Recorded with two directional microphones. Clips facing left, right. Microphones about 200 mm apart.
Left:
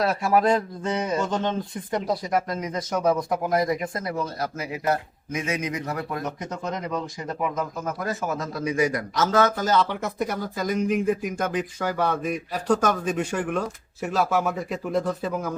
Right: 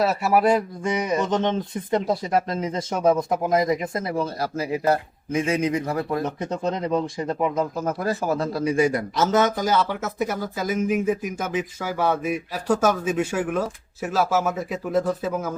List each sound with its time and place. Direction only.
0.0 s speech: 5° right (ahead or behind)